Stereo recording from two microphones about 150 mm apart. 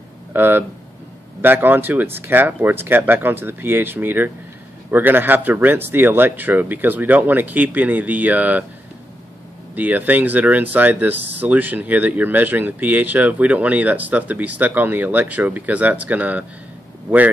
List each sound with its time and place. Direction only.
0.3 s speech: 15° right (ahead or behind)
9.8 s speech: 10° right (ahead or behind)